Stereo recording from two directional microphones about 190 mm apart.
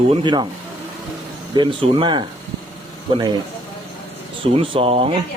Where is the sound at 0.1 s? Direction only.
25° right (ahead or behind).